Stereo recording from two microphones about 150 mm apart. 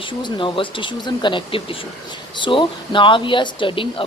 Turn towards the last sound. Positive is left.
turn(degrees=35)  # may be behind; listen again after turning